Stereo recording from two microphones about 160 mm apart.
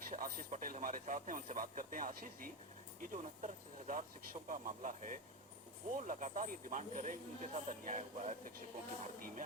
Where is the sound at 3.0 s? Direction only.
55° right (ahead or behind).